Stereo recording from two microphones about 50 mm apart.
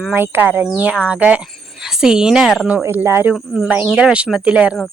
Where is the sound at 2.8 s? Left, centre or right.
Right.